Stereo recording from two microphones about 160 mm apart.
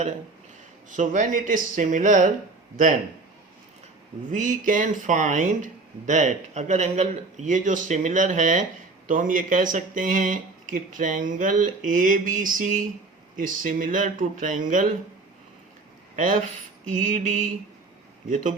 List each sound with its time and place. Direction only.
0.9 s speech: 50° right (ahead or behind)
4.3 s speech: 50° right (ahead or behind)
16.1 s speech: 55° right (ahead or behind)